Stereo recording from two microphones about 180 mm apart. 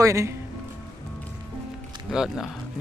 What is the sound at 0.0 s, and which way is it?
Speech, 15° right (ahead or behind).